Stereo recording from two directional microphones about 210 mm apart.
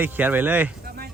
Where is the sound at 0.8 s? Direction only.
45° right (ahead or behind).